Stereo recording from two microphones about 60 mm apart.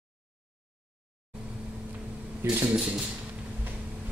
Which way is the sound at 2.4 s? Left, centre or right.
Right.